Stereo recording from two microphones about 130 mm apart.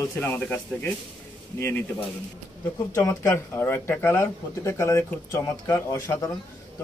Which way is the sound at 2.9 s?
25° left (ahead or behind).